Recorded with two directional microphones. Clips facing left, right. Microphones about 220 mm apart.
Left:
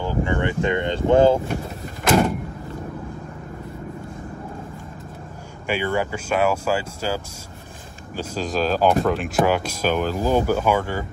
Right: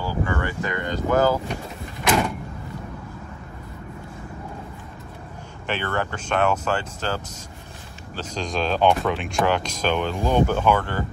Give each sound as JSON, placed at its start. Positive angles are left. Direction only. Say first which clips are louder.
{"t": 0.0, "sound": "speech", "louder": "left 3 dB", "side_deg": 20}
{"t": 5.7, "sound": "speech", "louder": "left 4 dB", "side_deg": 10}
{"t": 8.2, "sound": "speech", "louder": "left 3 dB", "side_deg": 5}